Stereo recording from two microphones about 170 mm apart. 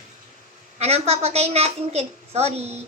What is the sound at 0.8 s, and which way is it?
A woman's voice, 35° right (ahead or behind).